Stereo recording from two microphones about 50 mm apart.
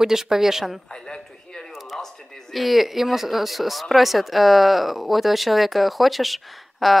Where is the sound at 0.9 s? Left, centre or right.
Centre.